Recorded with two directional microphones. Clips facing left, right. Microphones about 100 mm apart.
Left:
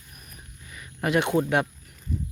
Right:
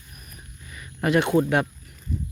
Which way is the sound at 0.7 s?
10° left (ahead or behind).